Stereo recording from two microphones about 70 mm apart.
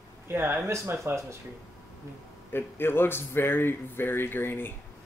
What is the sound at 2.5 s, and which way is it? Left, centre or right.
Speech, left.